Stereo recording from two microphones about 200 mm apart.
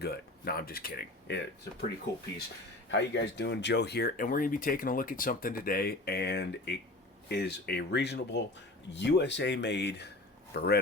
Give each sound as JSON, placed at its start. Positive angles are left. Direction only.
{"t": 0.0, "sound": "speech", "side_deg": 50}
{"t": 2.9, "sound": "speech", "side_deg": 60}